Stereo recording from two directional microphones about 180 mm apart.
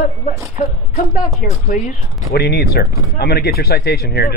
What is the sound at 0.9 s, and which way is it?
Speech, 45° left (ahead or behind).